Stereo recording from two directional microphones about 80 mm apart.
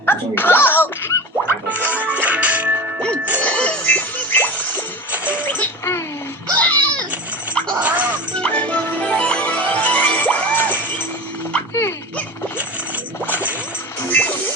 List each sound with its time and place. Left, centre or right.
0.0 s speech: left
1.5 s music: centre
3.4 s music: centre
6.6 s children playing: centre
7.8 s music: centre
8.4 s music: centre
11.7 s music: left
14.2 s music: centre